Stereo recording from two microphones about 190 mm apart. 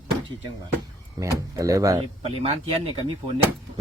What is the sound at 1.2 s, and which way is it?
Speech, 15° right (ahead or behind).